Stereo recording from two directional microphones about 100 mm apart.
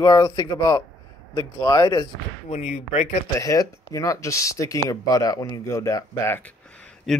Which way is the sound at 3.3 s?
35° left (ahead or behind).